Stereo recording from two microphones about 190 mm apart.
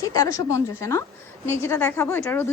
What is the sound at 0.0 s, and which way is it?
A woman's voice, 15° left (ahead or behind).